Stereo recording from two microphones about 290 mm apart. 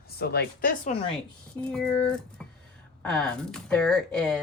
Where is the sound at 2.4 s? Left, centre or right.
Centre.